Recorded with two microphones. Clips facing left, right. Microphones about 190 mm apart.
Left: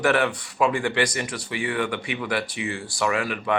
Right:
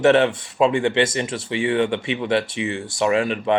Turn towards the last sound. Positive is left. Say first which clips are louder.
# right 5 dB
turn(degrees=-25)  # may be behind; listen again after turning